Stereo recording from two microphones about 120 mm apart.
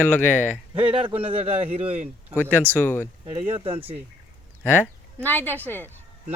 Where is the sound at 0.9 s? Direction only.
45° right (ahead or behind).